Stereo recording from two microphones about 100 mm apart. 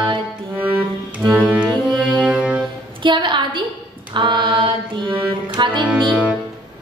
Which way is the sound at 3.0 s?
55° right (ahead or behind).